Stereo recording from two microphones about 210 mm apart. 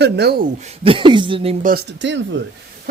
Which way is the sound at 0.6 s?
30° right (ahead or behind).